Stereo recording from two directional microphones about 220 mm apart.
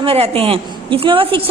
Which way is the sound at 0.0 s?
25° right (ahead or behind).